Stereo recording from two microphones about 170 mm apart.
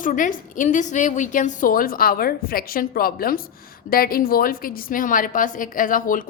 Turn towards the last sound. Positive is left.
turn(degrees=55)  # may be behind; listen again after turning